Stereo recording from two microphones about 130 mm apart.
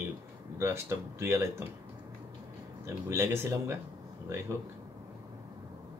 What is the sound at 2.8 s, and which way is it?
Speech, 20° right (ahead or behind).